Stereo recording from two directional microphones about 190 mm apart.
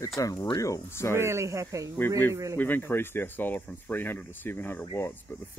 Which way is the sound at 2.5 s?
10° left (ahead or behind).